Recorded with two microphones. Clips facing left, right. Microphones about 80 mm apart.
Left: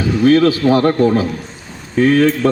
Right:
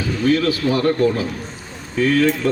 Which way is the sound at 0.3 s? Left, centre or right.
Left.